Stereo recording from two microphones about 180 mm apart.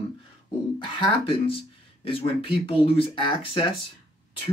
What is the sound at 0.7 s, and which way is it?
Speech, 30° left (ahead or behind).